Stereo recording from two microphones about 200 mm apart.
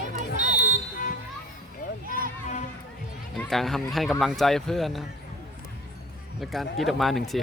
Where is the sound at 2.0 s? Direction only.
45° right (ahead or behind).